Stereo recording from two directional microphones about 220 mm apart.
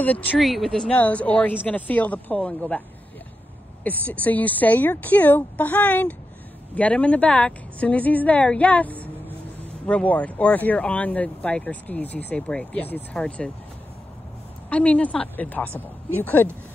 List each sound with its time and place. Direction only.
0.0 s speech: 5° left (ahead or behind)
3.8 s speech: 5° left (ahead or behind)
14.7 s speech: 5° left (ahead or behind)